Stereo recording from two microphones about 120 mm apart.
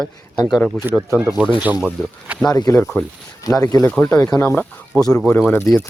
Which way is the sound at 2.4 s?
30° left (ahead or behind).